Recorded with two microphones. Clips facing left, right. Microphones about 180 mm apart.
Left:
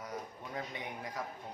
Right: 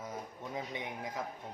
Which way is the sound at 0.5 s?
20° right (ahead or behind).